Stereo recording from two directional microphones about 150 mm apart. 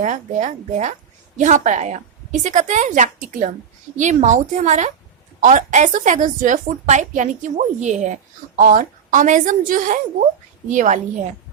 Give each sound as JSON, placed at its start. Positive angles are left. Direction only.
{"t": 0.0, "sound": "a woman's voice", "side_deg": -55}